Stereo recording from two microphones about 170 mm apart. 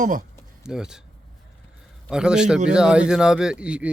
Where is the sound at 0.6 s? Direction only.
5° right (ahead or behind).